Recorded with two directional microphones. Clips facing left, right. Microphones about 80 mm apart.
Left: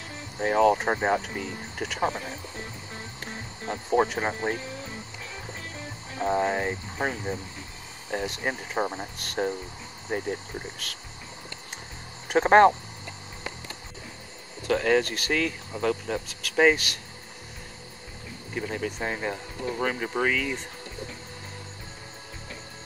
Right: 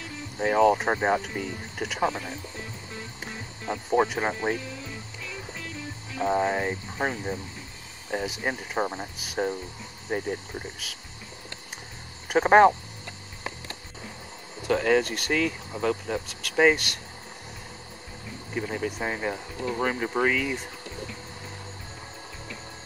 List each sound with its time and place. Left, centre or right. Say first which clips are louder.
0.4 s speech: even; centre
3.9 s speech: even; centre
6.2 s speech: even; centre
12.3 s speech: even; centre
14.6 s speech: even; centre
18.5 s speech: right 1 dB; centre